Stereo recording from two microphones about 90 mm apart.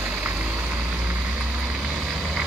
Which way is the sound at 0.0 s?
20° right (ahead or behind).